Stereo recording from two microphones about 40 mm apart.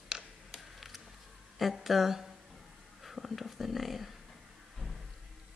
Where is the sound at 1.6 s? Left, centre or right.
Centre.